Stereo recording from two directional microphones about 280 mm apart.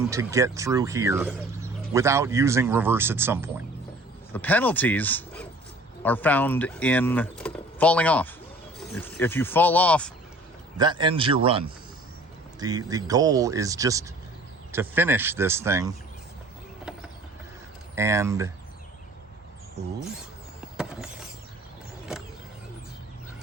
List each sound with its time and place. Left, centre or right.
0.1 s speech: centre
4.3 s speech: centre
10.8 s a man's voice: centre
17.9 s speech: centre
20.7 s a sound: centre